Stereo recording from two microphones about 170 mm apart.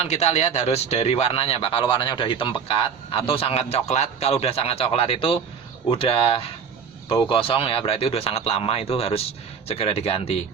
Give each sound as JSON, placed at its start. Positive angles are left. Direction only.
{"t": 0.0, "sound": "a man's voice", "side_deg": 40}